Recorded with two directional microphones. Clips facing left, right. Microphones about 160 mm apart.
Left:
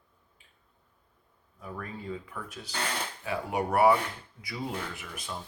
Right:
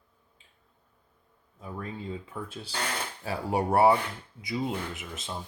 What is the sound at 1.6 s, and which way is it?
Speech, 25° right (ahead or behind).